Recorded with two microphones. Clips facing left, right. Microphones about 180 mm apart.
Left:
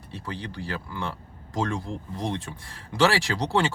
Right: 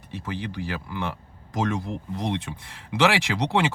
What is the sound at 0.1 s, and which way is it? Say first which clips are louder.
Speech: right 3 dB; 15° right (ahead or behind).